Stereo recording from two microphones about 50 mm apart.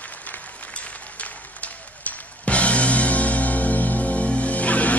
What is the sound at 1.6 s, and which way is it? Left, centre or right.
Music, left.